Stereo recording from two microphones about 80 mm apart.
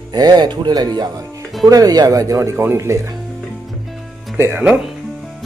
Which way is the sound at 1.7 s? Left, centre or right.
Right.